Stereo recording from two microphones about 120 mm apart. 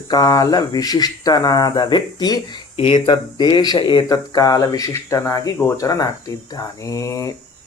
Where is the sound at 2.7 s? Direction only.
50° left (ahead or behind); by 5.5 s 30° left (ahead or behind).